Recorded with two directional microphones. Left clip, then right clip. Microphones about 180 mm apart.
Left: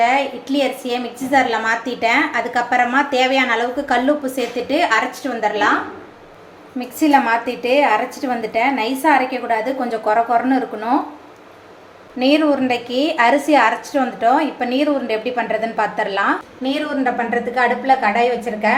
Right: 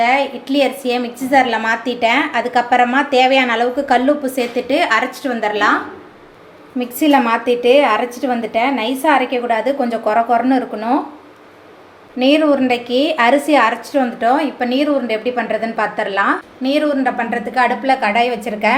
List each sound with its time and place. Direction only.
0.0 s a woman's voice: 15° right (ahead or behind)
6.7 s a woman's voice: 30° right (ahead or behind)
12.2 s a woman's voice: 15° right (ahead or behind)
16.6 s a woman's voice: 35° right (ahead or behind)